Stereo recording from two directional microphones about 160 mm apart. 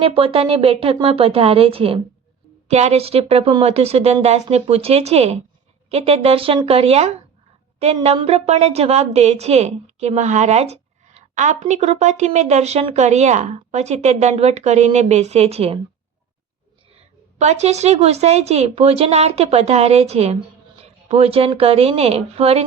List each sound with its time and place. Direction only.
0.0 s a woman's voice: 35° right (ahead or behind)
17.3 s speech: 45° right (ahead or behind)